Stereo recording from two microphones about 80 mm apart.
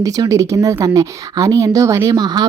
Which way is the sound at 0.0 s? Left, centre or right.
Right.